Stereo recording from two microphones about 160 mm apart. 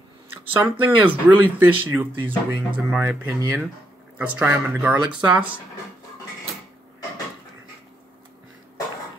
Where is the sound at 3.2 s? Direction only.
20° right (ahead or behind).